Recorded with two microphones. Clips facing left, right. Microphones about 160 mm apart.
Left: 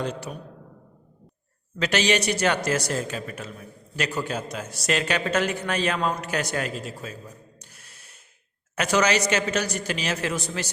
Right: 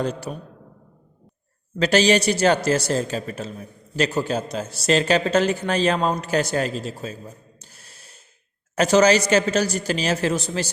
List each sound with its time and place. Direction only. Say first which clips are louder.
0.0 s a man's voice: right 4 dB; 35° right (ahead or behind)
1.8 s a man's voice: right 6 dB; 35° right (ahead or behind)
7.3 s gasp: right 3 dB; 30° right (ahead or behind)
8.7 s a man's voice: right 6 dB; 30° right (ahead or behind)